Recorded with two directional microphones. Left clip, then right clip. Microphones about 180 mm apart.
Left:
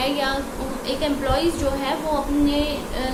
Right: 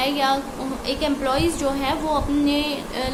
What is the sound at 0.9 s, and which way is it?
A woman's voice, 45° right (ahead or behind).